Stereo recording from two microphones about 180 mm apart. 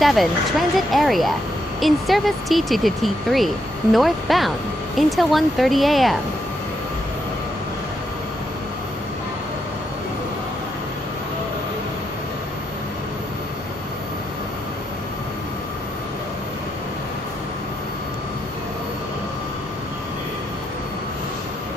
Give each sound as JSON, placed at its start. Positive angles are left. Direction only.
{"t": 0.0, "sound": "speech", "side_deg": 0}